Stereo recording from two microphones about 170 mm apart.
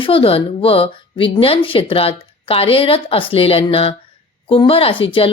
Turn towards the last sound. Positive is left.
turn(degrees=30)  # may be behind; listen again after turning